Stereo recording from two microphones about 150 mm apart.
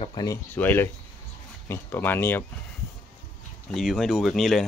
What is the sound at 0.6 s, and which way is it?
Speech, 10° left (ahead or behind).